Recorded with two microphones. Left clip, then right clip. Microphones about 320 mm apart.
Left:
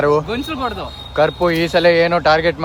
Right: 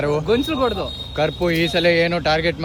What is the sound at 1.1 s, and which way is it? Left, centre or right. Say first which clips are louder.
Speech: left 6 dB; left.